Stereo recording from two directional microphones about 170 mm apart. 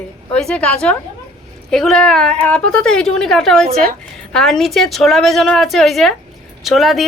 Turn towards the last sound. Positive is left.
turn(degrees=0)  # may be behind; listen again after turning